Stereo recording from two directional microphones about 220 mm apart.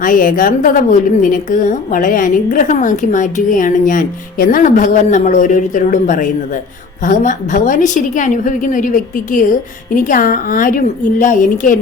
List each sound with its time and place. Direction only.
0.0 s a woman's voice: 40° left (ahead or behind)